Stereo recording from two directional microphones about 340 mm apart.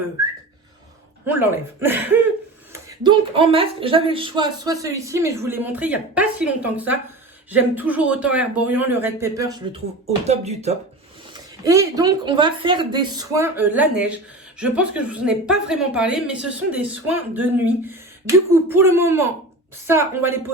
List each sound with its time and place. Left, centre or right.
1.3 s a woman's voice: centre